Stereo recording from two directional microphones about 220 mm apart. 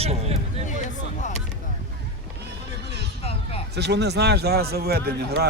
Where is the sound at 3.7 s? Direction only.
50° right (ahead or behind).